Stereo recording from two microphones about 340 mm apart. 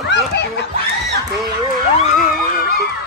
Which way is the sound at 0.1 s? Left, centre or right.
Left.